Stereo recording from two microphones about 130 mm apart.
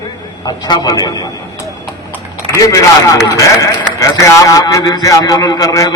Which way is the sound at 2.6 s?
25° left (ahead or behind).